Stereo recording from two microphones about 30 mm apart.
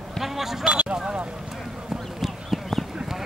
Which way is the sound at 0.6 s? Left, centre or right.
Right.